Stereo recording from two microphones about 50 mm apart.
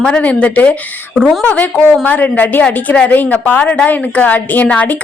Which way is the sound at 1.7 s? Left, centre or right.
Left.